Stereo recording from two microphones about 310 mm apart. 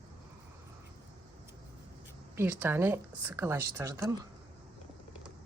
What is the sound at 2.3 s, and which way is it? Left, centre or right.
A woman's voice, centre.